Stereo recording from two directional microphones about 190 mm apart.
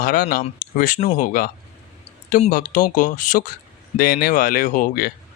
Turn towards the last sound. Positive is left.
turn(degrees=50)  # may be behind; listen again after turning